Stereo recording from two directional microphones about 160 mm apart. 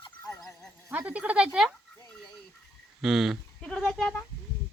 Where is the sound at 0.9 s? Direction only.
10° right (ahead or behind).